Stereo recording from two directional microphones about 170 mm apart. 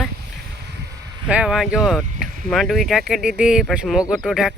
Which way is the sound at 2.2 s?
55° right (ahead or behind).